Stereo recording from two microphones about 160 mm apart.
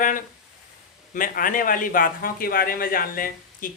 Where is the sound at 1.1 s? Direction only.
60° left (ahead or behind).